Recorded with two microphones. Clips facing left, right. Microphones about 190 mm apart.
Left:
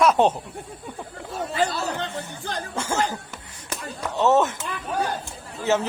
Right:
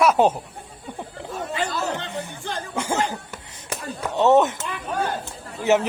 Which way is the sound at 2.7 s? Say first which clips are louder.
Right 3 dB; 15° right (ahead or behind).